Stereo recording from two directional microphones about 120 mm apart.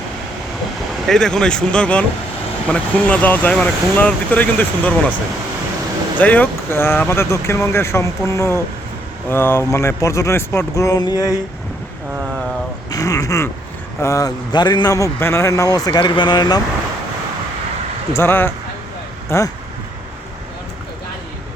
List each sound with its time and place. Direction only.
1.0 s speech: 5° left (ahead or behind)
6.1 s speech: 15° left (ahead or behind); by 11.3 s 35° left (ahead or behind)
12.9 s a man's voice: 30° left (ahead or behind)
18.1 s speech: 20° left (ahead or behind)